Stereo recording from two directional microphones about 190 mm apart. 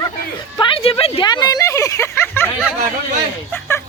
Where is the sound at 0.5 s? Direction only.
25° left (ahead or behind).